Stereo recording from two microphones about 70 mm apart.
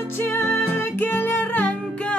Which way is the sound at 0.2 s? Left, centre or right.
Left.